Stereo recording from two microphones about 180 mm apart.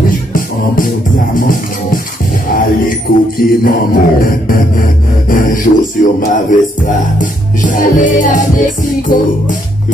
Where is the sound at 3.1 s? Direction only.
50° left (ahead or behind).